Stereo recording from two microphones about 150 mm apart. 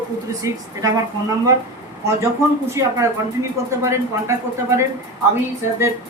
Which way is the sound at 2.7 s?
20° right (ahead or behind).